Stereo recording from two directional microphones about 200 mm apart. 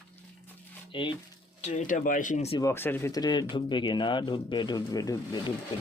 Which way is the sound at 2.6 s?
10° left (ahead or behind).